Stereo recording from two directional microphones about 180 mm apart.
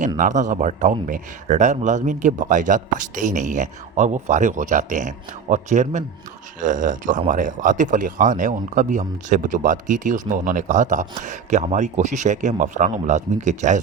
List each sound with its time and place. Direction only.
0.2 s a man's voice: 45° right (ahead or behind)